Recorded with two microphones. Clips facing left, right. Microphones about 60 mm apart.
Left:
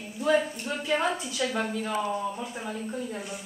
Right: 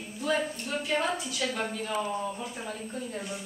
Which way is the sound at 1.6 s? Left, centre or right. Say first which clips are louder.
Left 2 dB; centre.